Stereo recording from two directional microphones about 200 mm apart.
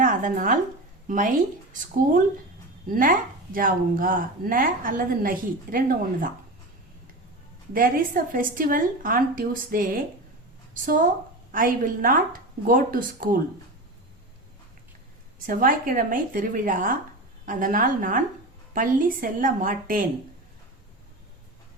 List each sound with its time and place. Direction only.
0.0 s speech: 40° right (ahead or behind)
2.8 s a woman's voice: 45° right (ahead or behind)
7.7 s a woman's voice: 45° right (ahead or behind)
15.4 s a woman's voice: 45° right (ahead or behind)